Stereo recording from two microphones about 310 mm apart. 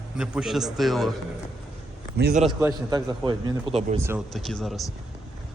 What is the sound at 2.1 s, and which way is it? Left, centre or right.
Speech, right.